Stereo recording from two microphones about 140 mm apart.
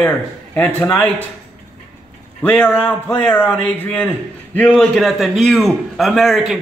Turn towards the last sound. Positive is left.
turn(degrees=0)  # may be behind; listen again after turning